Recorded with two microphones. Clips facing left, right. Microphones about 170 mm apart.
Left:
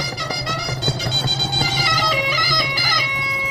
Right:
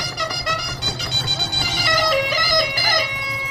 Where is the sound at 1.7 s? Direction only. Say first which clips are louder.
Right 7 dB; 65° right (ahead or behind); by 3.0 s 45° right (ahead or behind).